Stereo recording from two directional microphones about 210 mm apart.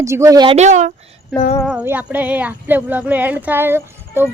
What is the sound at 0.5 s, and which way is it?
Speech, 35° right (ahead or behind).